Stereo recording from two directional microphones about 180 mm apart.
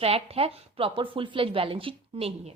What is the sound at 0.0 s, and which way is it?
A woman's voice, 35° right (ahead or behind).